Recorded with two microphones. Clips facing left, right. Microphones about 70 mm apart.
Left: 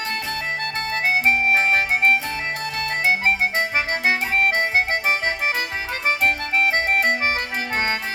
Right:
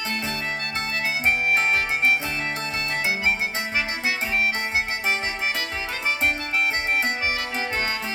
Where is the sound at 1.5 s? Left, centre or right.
Left.